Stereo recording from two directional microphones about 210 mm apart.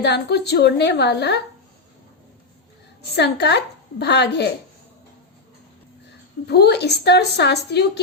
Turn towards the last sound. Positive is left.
turn(degrees=55)  # may be behind; listen again after turning